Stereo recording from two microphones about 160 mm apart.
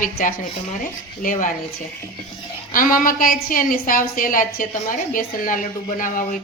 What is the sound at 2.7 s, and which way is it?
Speech, 60° left (ahead or behind).